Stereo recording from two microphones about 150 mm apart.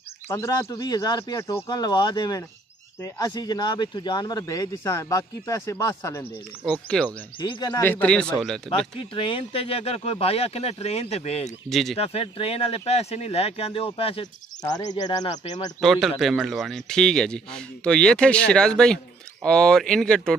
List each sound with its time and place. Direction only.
0.3 s speech: 20° left (ahead or behind)
6.6 s a man's voice: 5° left (ahead or behind)
7.3 s speech: 30° left (ahead or behind)
7.8 s a man's voice: 10° left (ahead or behind)
8.6 s speech: 35° left (ahead or behind)
11.4 s a man's voice: centre (ahead or behind)
12.0 s speech: 40° left (ahead or behind)
14.2 s speech: 25° left (ahead or behind)
15.8 s a man's voice: centre (ahead or behind)